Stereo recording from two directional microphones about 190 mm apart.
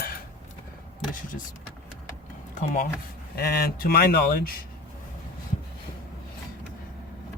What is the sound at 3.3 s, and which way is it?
Speech, 55° left (ahead or behind).